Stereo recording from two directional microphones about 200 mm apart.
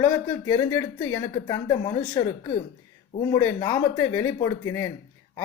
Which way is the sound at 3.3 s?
15° left (ahead or behind).